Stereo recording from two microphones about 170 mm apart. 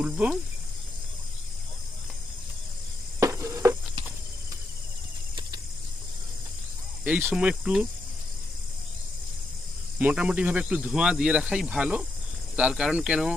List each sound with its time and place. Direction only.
0.0 s speech: 10° right (ahead or behind)
3.2 s a sound: 20° right (ahead or behind)
7.0 s speech: 10° right (ahead or behind)
10.0 s speech: 10° right (ahead or behind)